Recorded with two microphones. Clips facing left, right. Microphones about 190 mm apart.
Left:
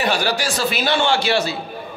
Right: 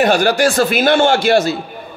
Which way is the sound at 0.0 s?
50° right (ahead or behind).